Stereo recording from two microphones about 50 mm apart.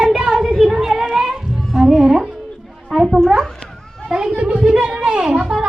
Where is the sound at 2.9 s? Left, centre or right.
Centre.